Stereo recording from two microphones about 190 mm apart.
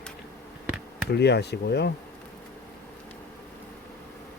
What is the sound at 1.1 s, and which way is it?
Speech, 60° left (ahead or behind).